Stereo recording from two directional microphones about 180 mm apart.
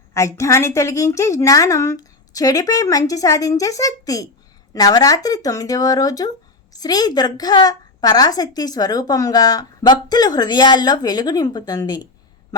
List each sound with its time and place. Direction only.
0.1 s a woman's voice: 15° left (ahead or behind)